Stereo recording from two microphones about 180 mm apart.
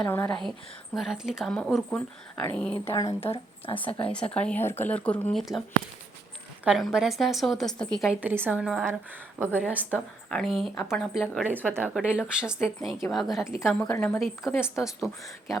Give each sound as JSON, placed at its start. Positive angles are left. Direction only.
{"t": 0.1, "sound": "a woman's voice", "side_deg": 10}
{"t": 2.9, "sound": "speech", "side_deg": 20}
{"t": 3.2, "sound": "speech", "side_deg": 30}
{"t": 4.1, "sound": "speech", "side_deg": 5}
{"t": 6.7, "sound": "a woman's voice", "side_deg": 0}
{"t": 10.2, "sound": "a woman's voice", "side_deg": 5}
{"t": 13.7, "sound": "speech", "side_deg": 10}
{"t": 14.8, "sound": "a woman's voice", "side_deg": -5}